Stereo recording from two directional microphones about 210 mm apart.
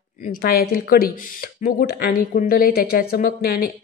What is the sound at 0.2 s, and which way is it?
Speech, 45° left (ahead or behind).